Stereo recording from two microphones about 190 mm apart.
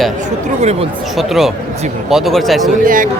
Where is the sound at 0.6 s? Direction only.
35° right (ahead or behind).